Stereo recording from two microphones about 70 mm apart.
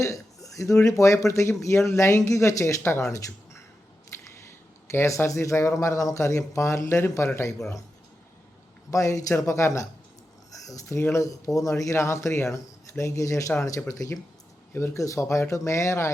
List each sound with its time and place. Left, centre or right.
0.0 s speech: left
8.9 s speech: left
14.7 s speech: left
14.9 s speech: left